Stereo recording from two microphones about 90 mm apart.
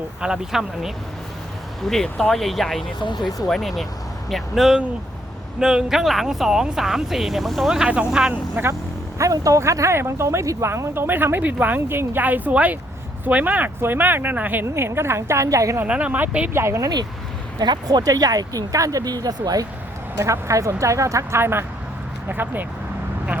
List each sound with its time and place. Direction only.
0.2 s speech: 5° right (ahead or behind)
3.0 s speech: 60° left (ahead or behind)
3.4 s speech: centre (ahead or behind); by 8.7 s 20° right (ahead or behind)
9.1 s speech: 35° right (ahead or behind)
15.8 s speech: 15° right (ahead or behind)
16.5 s a woman's voice: 30° right (ahead or behind)
17.6 s speech: 50° right (ahead or behind)
20.1 s a woman's voice: 35° right (ahead or behind)